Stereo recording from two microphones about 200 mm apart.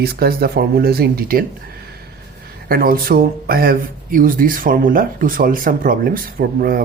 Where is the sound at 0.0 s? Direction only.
50° right (ahead or behind).